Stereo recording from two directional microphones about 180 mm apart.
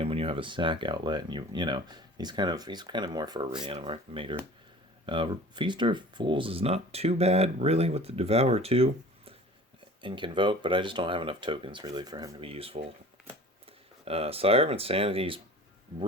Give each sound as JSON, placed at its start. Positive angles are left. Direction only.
{"t": 0.0, "sound": "speech", "side_deg": -30}
{"t": 12.4, "sound": "speech", "side_deg": -30}
{"t": 14.0, "sound": "speech", "side_deg": -35}